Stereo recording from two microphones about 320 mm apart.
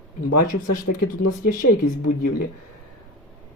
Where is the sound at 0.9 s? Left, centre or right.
Left.